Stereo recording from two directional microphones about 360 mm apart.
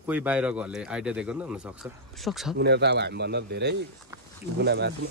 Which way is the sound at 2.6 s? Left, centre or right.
Right.